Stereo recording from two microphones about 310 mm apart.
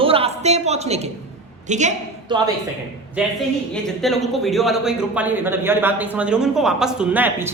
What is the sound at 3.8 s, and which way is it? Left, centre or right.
A woman's voice, centre.